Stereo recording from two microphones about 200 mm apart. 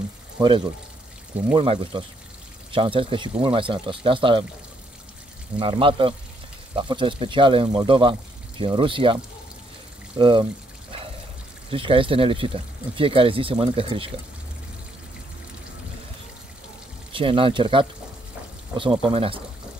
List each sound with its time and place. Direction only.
0.4 s speech: 25° right (ahead or behind)
5.6 s speech: 25° right (ahead or behind)
11.7 s speech: 25° right (ahead or behind)
17.1 s speech: 25° right (ahead or behind)